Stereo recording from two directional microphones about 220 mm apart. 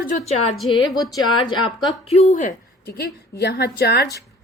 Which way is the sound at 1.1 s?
20° left (ahead or behind).